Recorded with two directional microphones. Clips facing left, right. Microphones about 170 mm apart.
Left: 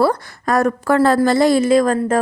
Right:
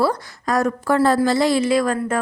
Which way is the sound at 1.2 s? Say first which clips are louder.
Left 4 dB; 50° left (ahead or behind).